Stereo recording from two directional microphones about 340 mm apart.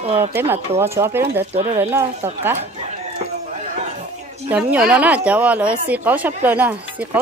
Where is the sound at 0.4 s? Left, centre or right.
Centre.